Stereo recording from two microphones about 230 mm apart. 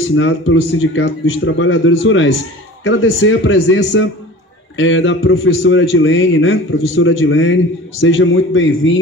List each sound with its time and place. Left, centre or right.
0.1 s a man's voice: left